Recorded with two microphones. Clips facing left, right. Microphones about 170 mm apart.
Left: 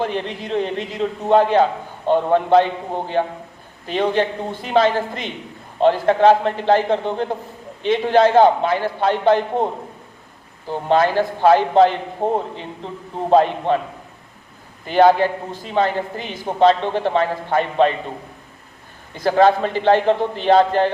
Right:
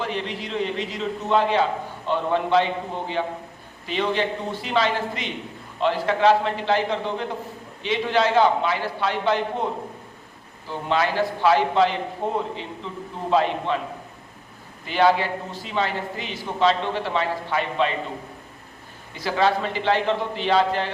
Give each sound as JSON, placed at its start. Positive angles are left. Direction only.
{"t": 0.0, "sound": "a man's voice", "side_deg": 50}
{"t": 10.7, "sound": "a man's voice", "side_deg": 50}
{"t": 13.7, "sound": "a man's voice", "side_deg": 50}
{"t": 14.8, "sound": "a man's voice", "side_deg": 50}
{"t": 19.2, "sound": "a man's voice", "side_deg": 50}